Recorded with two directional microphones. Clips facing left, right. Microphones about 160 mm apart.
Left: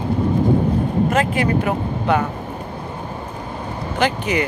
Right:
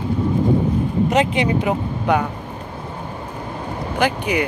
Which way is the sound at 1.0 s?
20° right (ahead or behind).